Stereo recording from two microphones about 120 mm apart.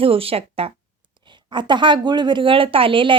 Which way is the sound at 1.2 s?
40° right (ahead or behind).